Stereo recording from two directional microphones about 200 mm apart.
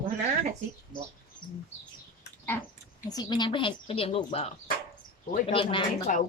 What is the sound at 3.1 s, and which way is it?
A woman's voice, 20° left (ahead or behind).